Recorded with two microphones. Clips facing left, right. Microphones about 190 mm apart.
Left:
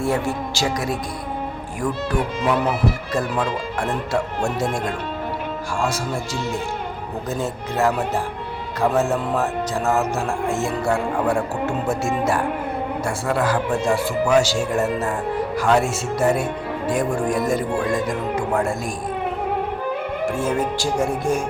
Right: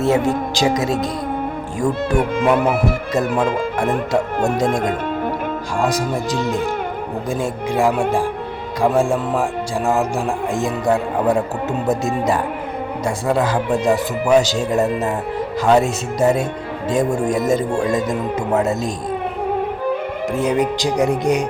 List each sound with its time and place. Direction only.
0.0 s speech: 20° right (ahead or behind)
2.1 s speech: 55° right (ahead or behind)
4.4 s speech: 40° right (ahead or behind)
7.3 s speech: 15° right (ahead or behind)
20.3 s speech: 15° right (ahead or behind)